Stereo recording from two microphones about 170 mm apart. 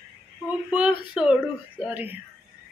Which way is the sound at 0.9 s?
30° left (ahead or behind).